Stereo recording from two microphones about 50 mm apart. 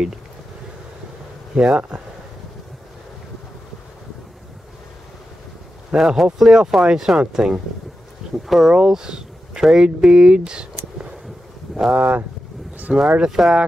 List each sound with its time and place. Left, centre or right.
1.5 s speech: centre
5.9 s a man's voice: centre
8.5 s speech: centre
8.7 s speech: centre
11.9 s speech: right
12.7 s vehicle: right
13.3 s speech: centre